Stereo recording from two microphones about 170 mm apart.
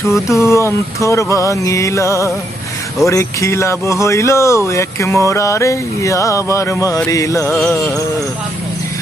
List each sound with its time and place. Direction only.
0.3 s speech: 15° left (ahead or behind)
7.1 s music: 20° left (ahead or behind)
7.7 s speech: 15° left (ahead or behind)